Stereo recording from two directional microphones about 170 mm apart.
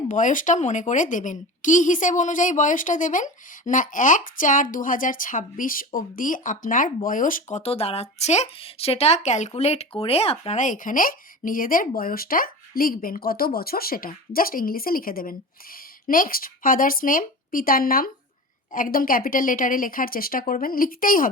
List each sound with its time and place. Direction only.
0.1 s a woman's voice: 50° left (ahead or behind)